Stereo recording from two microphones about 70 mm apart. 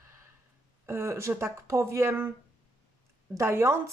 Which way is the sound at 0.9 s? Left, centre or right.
Right.